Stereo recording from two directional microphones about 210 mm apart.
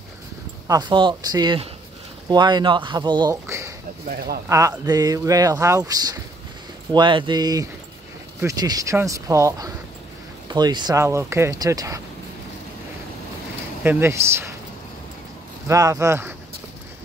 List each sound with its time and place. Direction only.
0.7 s speech: 20° right (ahead or behind)
13.8 s speech: 10° right (ahead or behind)
15.7 s speech: 15° right (ahead or behind)